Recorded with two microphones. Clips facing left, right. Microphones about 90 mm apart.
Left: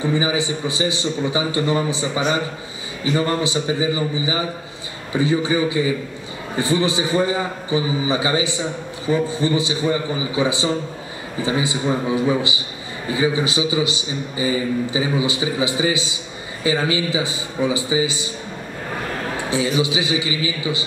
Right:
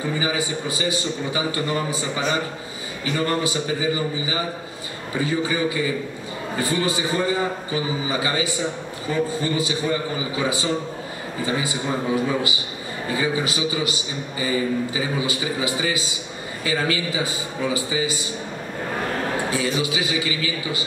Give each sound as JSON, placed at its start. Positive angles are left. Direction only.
{"t": 0.2, "sound": "a man's voice", "side_deg": 20}
{"t": 3.2, "sound": "a man's voice", "side_deg": 20}
{"t": 19.5, "sound": "a man's voice", "side_deg": 20}